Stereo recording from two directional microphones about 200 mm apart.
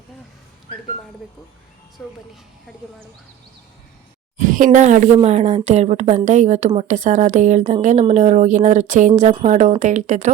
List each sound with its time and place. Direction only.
2.0 s speech: 5° left (ahead or behind)
4.4 s speech: 40° right (ahead or behind)